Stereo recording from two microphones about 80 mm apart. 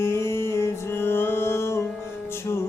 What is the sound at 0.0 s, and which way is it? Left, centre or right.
Music, left.